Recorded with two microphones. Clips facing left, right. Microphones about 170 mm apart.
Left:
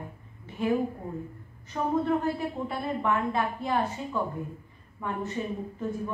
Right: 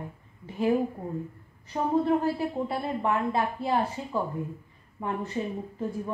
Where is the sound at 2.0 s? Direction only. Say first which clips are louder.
Right 2 dB; 30° right (ahead or behind).